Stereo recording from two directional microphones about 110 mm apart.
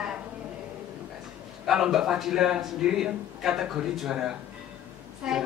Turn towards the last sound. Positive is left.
turn(degrees=-5)  # may be behind; listen again after turning